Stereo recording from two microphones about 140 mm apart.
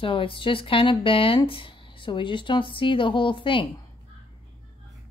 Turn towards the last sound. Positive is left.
turn(degrees=35)  # may be behind; listen again after turning